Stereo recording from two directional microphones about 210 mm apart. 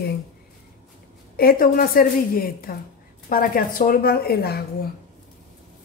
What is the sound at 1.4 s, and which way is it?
A woman's voice, 45° left (ahead or behind).